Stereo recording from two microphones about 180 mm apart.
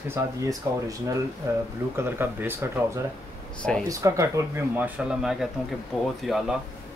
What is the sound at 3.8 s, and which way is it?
Speech, 15° right (ahead or behind).